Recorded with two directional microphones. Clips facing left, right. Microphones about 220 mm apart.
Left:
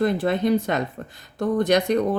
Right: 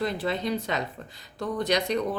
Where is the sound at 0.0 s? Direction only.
50° left (ahead or behind).